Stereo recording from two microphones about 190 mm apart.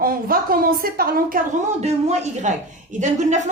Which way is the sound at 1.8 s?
35° right (ahead or behind).